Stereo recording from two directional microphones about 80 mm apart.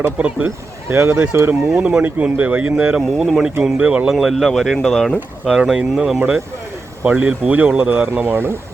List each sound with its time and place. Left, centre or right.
0.2 s speech: centre
0.9 s speech: right
1.6 s speech: centre
4.1 s speech: centre; by 8.5 s right